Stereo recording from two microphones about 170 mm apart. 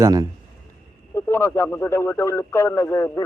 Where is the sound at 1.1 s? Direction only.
15° left (ahead or behind).